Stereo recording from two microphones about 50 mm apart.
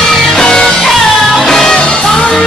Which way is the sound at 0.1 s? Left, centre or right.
Centre.